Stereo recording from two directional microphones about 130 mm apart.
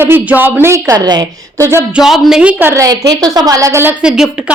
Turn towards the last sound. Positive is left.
turn(degrees=-5)  # may be behind; listen again after turning